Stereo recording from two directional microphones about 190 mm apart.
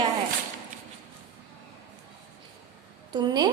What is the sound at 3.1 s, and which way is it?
Speech, 20° right (ahead or behind).